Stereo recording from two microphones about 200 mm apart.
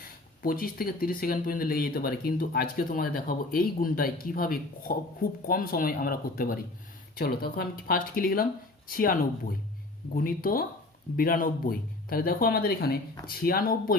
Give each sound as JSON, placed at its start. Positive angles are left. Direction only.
{"t": 0.4, "sound": "speech", "side_deg": 45}
{"t": 10.2, "sound": "speech", "side_deg": 45}